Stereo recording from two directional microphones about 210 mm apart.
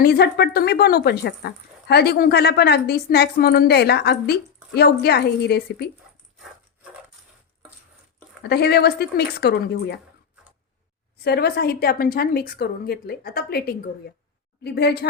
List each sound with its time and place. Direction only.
0.0 s speech: 50° left (ahead or behind)
8.4 s speech: 50° left (ahead or behind)
11.2 s speech: 50° left (ahead or behind)